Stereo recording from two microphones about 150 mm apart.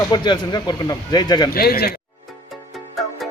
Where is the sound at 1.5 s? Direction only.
90° left.